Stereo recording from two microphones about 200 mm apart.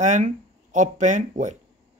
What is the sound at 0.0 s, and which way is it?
Speech, 40° right (ahead or behind).